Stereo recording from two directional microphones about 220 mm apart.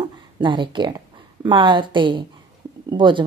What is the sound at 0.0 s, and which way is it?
A woman's voice, 20° right (ahead or behind).